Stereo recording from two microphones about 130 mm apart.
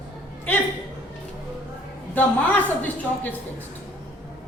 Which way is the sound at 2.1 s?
10° left (ahead or behind).